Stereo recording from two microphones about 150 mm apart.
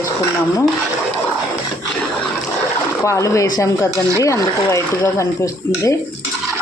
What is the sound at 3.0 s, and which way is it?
Speech, 20° left (ahead or behind).